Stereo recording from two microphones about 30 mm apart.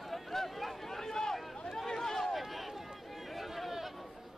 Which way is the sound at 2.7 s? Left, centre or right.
Centre.